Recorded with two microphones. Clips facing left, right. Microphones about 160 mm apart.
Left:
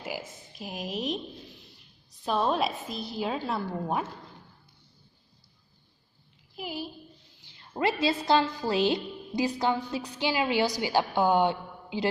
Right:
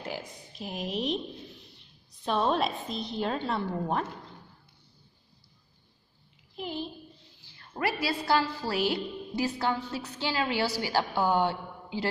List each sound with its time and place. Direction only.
0.0 s speech: 5° left (ahead or behind)
2.2 s a woman's voice: centre (ahead or behind)
6.5 s a sound: 5° left (ahead or behind)
7.4 s a woman's voice: 20° left (ahead or behind)